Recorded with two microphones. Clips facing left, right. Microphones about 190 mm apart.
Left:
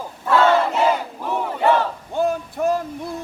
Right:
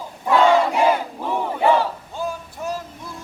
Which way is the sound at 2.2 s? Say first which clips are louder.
Left 9 dB; 60° left (ahead or behind).